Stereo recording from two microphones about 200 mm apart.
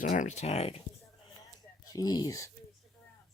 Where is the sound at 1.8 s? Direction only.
20° left (ahead or behind).